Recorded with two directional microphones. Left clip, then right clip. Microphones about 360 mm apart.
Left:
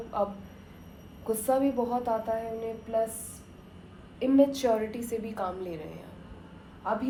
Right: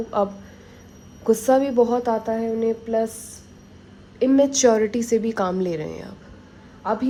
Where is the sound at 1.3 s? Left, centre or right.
Right.